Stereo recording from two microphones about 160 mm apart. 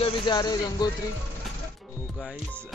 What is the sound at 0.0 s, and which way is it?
Speech, 25° left (ahead or behind).